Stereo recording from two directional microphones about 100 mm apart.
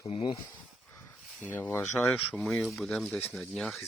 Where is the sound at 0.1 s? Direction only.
65° left (ahead or behind).